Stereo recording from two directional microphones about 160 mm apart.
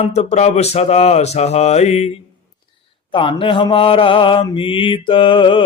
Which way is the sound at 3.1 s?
30° left (ahead or behind).